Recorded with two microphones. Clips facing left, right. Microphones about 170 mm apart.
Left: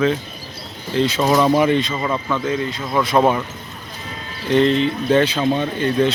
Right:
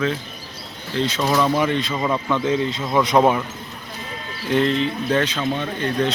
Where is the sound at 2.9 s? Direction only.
15° right (ahead or behind).